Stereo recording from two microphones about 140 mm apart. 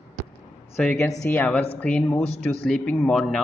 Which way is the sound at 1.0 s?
25° left (ahead or behind).